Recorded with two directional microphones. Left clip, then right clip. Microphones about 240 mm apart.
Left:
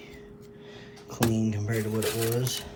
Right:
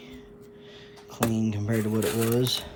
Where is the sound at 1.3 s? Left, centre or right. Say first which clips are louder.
Even; centre.